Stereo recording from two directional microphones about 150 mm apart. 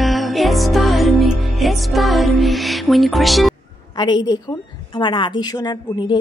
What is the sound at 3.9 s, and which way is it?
A woman's voice, 30° left (ahead or behind).